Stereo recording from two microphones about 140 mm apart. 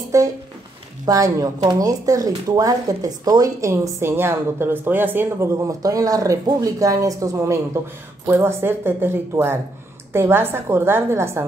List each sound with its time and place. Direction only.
0.1 s speech: 25° right (ahead or behind)